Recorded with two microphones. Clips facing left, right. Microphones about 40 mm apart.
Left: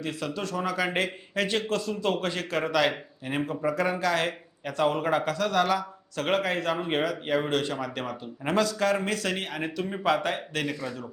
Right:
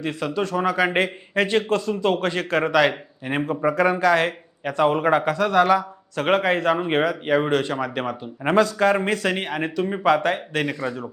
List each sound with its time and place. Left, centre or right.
0.0 s a man's voice: centre
3.2 s speech: right
3.7 s a man's voice: centre
7.3 s speech: right
7.7 s speech: centre
8.4 s a man's voice: right
9.6 s speech: right